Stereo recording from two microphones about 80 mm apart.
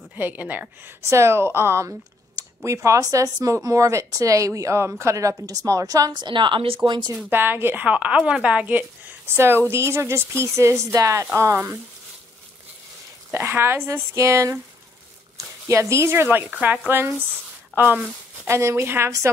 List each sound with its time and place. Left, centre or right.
0.1 s speech: right
1.0 s a woman's voice: right
6.1 s a woman's voice: right
7.2 s a woman's voice: right
9.3 s speech: right
13.3 s speech: right
15.7 s speech: right; by 18.0 s centre
18.5 s speech: right